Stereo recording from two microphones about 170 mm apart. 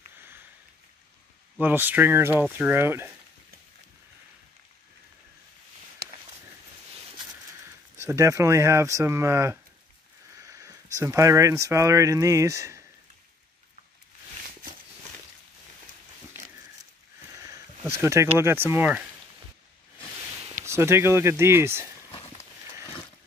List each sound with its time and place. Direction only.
1.6 s speech: 10° right (ahead or behind)
7.6 s speech: 15° right (ahead or behind)
17.4 s speech: 15° right (ahead or behind)
20.6 s speech: 15° right (ahead or behind)